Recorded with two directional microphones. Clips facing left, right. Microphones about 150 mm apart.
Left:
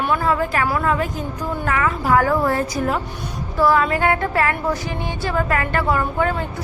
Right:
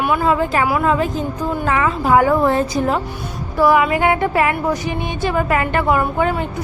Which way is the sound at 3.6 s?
15° right (ahead or behind).